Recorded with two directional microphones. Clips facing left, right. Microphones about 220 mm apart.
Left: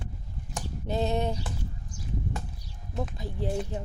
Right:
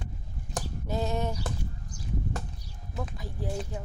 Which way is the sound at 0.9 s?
20° left (ahead or behind).